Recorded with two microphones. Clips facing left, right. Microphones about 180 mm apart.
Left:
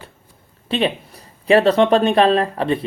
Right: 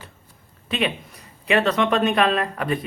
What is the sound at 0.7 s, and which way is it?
Speech, 30° left (ahead or behind).